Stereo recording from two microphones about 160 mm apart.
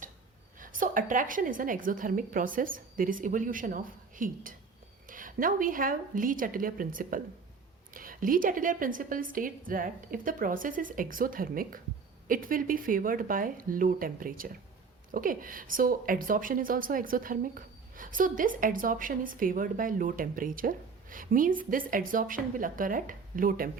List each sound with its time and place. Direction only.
0.6 s a woman's voice: 55° right (ahead or behind)